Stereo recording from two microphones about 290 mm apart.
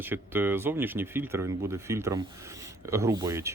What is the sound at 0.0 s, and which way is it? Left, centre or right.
Speech, centre.